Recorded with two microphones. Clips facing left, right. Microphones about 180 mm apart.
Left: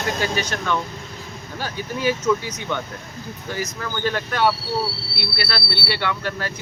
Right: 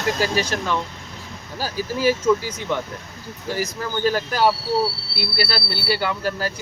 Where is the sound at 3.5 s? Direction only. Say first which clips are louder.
Right 3 dB; 30° right (ahead or behind).